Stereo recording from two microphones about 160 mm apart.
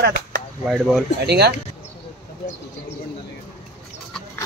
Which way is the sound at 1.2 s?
90° right.